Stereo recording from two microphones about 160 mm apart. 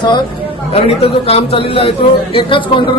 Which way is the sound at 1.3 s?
35° left (ahead or behind).